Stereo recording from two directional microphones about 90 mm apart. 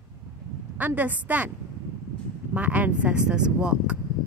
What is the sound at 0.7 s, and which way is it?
Speech, 20° right (ahead or behind).